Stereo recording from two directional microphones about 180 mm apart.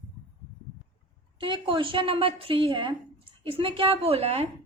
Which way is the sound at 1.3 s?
30° right (ahead or behind).